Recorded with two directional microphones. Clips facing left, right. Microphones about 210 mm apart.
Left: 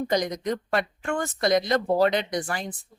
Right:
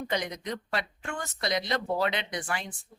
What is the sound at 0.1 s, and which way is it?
Speech, 40° left (ahead or behind).